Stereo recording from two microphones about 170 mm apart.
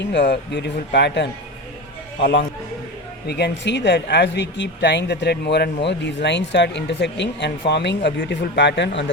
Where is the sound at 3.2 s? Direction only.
80° left.